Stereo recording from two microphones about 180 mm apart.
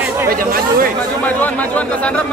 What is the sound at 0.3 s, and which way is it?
Speech, 55° right (ahead or behind).